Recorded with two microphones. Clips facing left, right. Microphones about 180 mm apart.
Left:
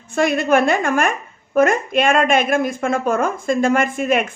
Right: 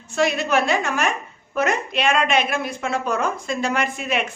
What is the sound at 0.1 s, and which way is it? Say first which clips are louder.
A woman's voice: left 4 dB; 55° left (ahead or behind).